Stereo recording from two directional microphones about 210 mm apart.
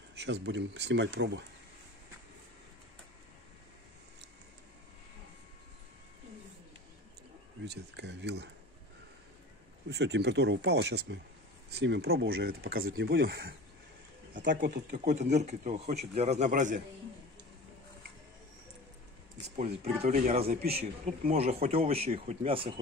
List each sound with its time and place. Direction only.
0.2 s speech: 55° right (ahead or behind)
7.6 s speech: 55° right (ahead or behind)
9.8 s speech: 55° right (ahead or behind); by 16.8 s 35° right (ahead or behind)
19.5 s speech: 40° right (ahead or behind)